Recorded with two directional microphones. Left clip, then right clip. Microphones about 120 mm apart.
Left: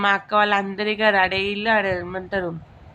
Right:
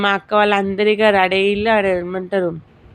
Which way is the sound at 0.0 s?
40° right (ahead or behind).